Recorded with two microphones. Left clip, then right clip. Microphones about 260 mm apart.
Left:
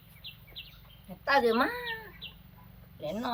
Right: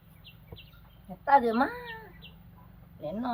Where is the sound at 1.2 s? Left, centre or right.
Centre.